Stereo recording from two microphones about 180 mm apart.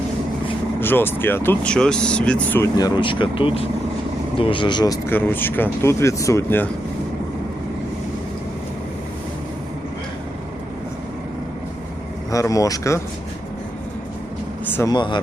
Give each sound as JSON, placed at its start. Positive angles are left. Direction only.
{"t": 0.8, "sound": "speech", "side_deg": 10}
{"t": 2.7, "sound": "speech", "side_deg": 25}
{"t": 5.0, "sound": "speech", "side_deg": 10}
{"t": 12.3, "sound": "speech", "side_deg": 20}
{"t": 14.6, "sound": "speech", "side_deg": 15}